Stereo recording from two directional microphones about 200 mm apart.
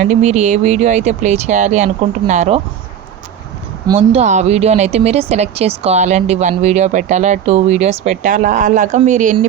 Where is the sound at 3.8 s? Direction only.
30° right (ahead or behind).